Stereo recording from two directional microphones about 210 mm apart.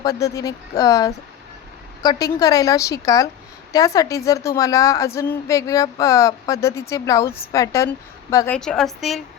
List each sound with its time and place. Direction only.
0.0 s a woman's voice: 15° left (ahead or behind); by 9.2 s centre (ahead or behind)